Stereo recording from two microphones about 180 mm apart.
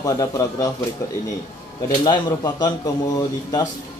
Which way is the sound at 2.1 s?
20° left (ahead or behind).